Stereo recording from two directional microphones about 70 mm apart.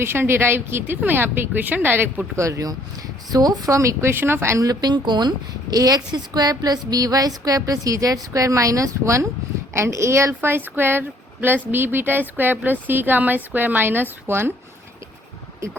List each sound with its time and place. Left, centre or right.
0.0 s speech: right
2.3 s speech: right
4.6 s speech: right
5.7 s a sound: right
9.7 s speech: right